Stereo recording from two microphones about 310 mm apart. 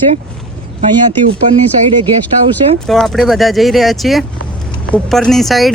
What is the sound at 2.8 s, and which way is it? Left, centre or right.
Speech, centre.